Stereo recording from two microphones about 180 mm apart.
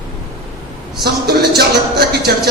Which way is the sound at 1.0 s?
60° right (ahead or behind).